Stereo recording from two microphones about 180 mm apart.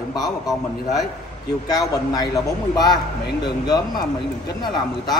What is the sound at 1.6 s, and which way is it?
A man's voice, 20° left (ahead or behind).